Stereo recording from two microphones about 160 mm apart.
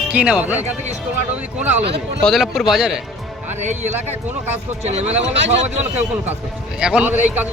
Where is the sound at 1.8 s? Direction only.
90° right.